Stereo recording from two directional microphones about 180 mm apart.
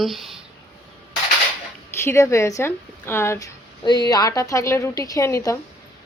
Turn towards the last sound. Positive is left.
turn(degrees=15)  # may be behind; listen again after turning